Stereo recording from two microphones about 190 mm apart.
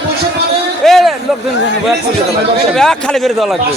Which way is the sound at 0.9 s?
Centre (ahead or behind).